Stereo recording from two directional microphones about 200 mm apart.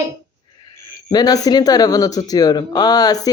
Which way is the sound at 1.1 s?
20° left (ahead or behind).